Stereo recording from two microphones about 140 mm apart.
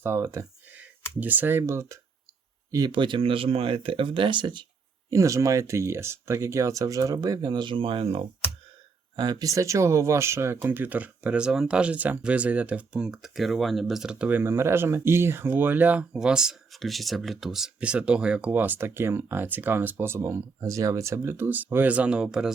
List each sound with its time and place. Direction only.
0.0 s speech: 20° right (ahead or behind)
5.1 s speech: 20° right (ahead or behind); by 8.2 s 40° right (ahead or behind)
9.1 s speech: 30° right (ahead or behind); by 22.5 s 5° right (ahead or behind)